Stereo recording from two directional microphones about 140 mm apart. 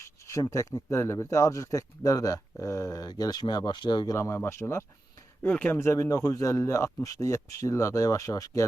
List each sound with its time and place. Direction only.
0.0 s speech: 20° left (ahead or behind)
4.2 s speech: 15° left (ahead or behind)